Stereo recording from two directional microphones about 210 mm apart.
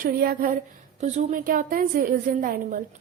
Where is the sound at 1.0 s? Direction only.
35° right (ahead or behind).